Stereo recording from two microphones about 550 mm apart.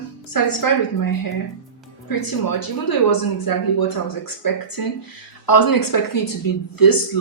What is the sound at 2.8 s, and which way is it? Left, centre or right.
Speech, left.